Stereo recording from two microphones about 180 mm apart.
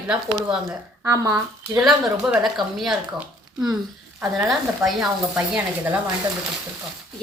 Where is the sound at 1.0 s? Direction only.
15° right (ahead or behind).